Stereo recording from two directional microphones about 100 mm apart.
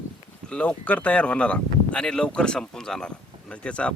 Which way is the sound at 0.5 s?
10° left (ahead or behind).